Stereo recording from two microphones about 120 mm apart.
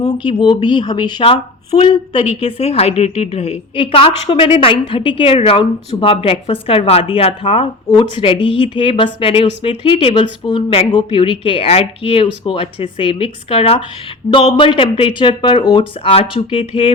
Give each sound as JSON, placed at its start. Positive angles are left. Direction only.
{"t": 0.0, "sound": "speech", "side_deg": 40}
{"t": 1.2, "sound": "a woman's voice", "side_deg": 55}
{"t": 3.8, "sound": "a woman's voice", "side_deg": 45}
{"t": 7.9, "sound": "a woman's voice", "side_deg": 40}